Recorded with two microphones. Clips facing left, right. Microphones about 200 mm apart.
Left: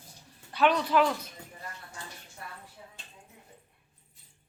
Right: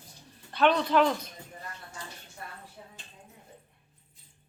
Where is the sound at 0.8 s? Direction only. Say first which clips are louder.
Right 1 dB; 10° left (ahead or behind).